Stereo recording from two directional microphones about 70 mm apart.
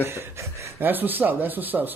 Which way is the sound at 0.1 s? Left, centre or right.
Right.